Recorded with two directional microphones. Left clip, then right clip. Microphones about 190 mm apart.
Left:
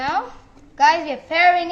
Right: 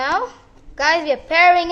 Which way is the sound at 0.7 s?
65° right (ahead or behind).